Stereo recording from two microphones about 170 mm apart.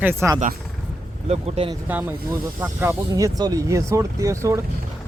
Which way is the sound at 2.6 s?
15° right (ahead or behind).